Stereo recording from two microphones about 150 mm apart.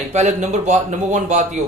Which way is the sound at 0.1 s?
50° right (ahead or behind).